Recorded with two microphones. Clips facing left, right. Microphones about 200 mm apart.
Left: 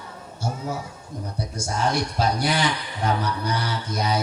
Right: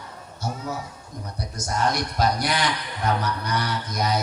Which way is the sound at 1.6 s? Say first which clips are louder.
Even; 30° left (ahead or behind).